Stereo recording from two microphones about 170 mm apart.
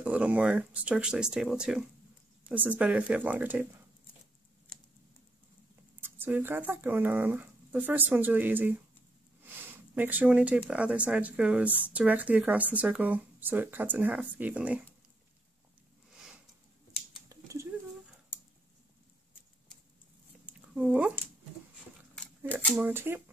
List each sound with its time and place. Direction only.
0.0 s speech: 10° right (ahead or behind)
5.9 s speech: 10° right (ahead or behind)
9.9 s speech: 10° right (ahead or behind)
17.3 s a sound: 20° right (ahead or behind)
20.4 s a sound: 10° right (ahead or behind)
22.8 s speech: 10° right (ahead or behind)